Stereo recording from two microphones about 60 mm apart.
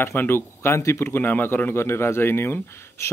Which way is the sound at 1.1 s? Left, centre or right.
Left.